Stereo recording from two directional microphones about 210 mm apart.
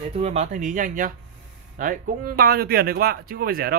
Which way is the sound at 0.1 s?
30° right (ahead or behind).